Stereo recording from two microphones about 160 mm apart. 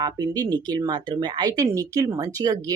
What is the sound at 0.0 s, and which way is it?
Speech, 25° right (ahead or behind).